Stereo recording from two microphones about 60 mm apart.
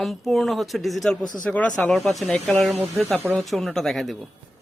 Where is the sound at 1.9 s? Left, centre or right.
Centre.